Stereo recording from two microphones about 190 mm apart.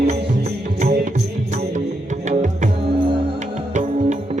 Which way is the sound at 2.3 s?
40° right (ahead or behind).